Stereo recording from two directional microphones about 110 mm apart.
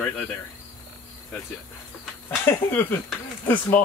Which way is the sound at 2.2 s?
20° left (ahead or behind).